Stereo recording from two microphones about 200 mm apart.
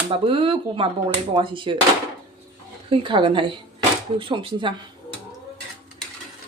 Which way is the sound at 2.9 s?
25° right (ahead or behind).